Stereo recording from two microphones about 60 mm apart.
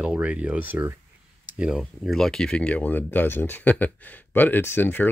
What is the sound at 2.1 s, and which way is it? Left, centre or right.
Speech, centre.